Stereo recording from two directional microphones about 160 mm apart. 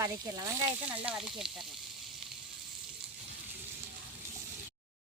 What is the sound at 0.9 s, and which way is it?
Speech, 5° right (ahead or behind).